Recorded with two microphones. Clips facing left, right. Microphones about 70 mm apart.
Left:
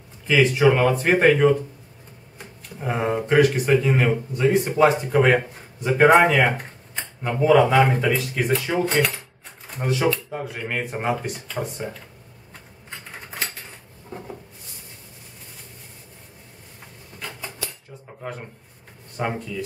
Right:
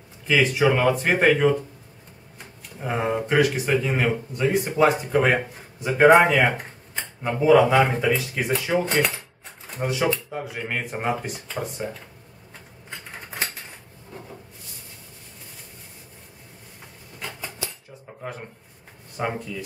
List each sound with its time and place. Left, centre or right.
0.3 s a man's voice: centre
17.2 s a sound: centre
18.2 s speech: centre